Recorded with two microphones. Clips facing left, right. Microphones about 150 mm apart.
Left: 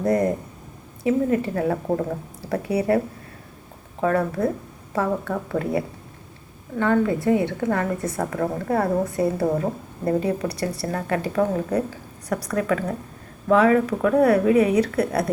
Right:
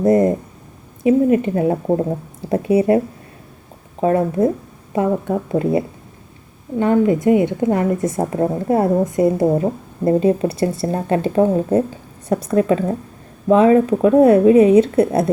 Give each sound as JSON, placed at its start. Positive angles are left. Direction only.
{"t": 0.0, "sound": "speech", "side_deg": -20}
{"t": 4.0, "sound": "speech", "side_deg": -25}